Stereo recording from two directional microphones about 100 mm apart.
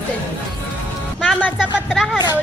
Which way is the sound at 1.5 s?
5° right (ahead or behind).